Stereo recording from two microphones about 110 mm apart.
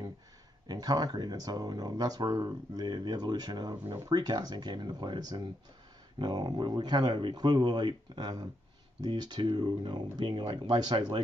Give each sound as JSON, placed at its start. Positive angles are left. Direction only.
{"t": 0.7, "sound": "speech", "side_deg": -35}
{"t": 4.1, "sound": "speech", "side_deg": -35}